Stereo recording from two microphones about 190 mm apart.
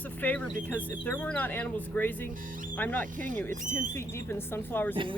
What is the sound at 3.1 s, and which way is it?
Speech, 45° right (ahead or behind).